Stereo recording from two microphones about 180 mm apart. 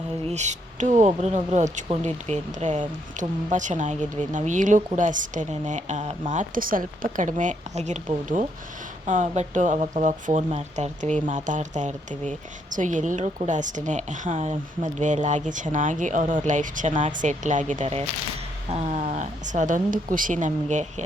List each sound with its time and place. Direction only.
0.3 s speech: 40° right (ahead or behind)
9.0 s speech: 40° right (ahead or behind)